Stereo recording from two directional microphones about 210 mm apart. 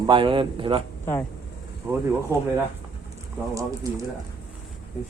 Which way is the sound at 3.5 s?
15° right (ahead or behind).